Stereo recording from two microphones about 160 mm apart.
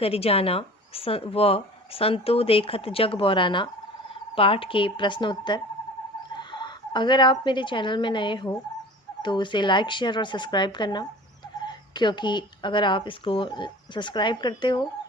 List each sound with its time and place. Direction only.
0.0 s speech: 40° left (ahead or behind)